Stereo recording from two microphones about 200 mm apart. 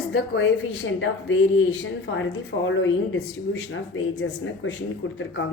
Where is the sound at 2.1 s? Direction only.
70° left (ahead or behind).